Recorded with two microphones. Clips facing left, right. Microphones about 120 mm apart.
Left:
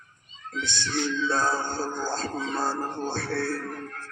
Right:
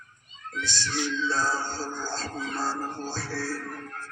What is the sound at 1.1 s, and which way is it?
Speech, 55° left (ahead or behind).